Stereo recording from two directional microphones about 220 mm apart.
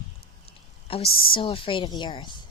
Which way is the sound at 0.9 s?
25° left (ahead or behind).